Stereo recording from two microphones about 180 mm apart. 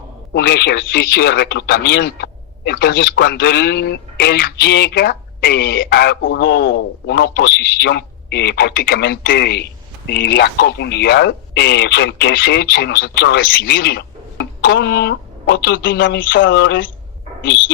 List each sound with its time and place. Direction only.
0.3 s speech: 65° left (ahead or behind)
16.0 s speech: 90° left